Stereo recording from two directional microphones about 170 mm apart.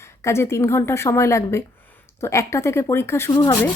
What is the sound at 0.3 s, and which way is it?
A woman's voice, 15° left (ahead or behind).